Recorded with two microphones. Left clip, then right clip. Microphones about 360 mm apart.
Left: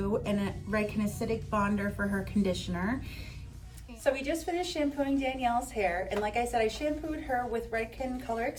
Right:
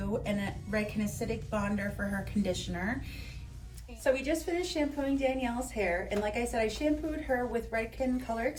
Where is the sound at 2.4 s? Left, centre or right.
Centre.